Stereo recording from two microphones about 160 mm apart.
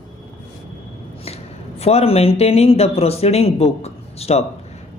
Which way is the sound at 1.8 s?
40° left (ahead or behind).